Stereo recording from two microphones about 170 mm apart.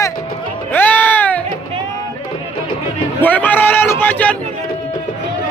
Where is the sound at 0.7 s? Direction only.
10° left (ahead or behind).